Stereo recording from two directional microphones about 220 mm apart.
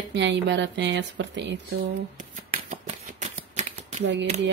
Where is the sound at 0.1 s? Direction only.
55° right (ahead or behind).